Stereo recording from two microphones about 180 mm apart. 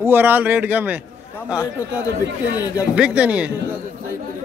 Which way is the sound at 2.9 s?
5° right (ahead or behind).